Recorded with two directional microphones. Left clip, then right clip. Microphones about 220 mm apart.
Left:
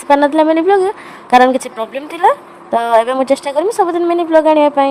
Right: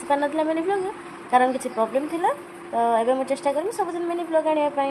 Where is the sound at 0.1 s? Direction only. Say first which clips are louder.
Left 12 dB; 45° left (ahead or behind).